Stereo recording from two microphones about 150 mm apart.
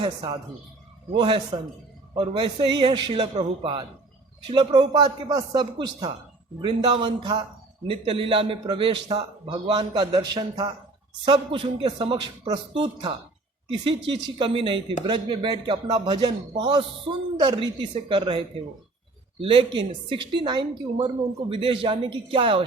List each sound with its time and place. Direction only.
0.0 s a man's voice: 30° right (ahead or behind)
14.3 s a man's voice: 35° right (ahead or behind)